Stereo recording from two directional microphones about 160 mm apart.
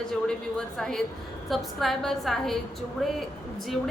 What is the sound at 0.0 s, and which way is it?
A woman's voice, 5° left (ahead or behind).